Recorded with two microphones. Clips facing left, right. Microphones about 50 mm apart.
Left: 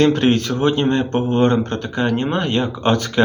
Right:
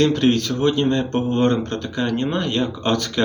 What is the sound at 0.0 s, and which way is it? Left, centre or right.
Speech, left.